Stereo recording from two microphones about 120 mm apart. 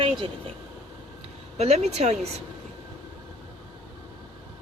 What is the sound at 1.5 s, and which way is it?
Speech, 60° right (ahead or behind).